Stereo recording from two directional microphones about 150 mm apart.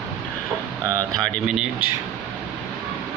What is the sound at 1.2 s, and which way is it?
Speech, 5° right (ahead or behind).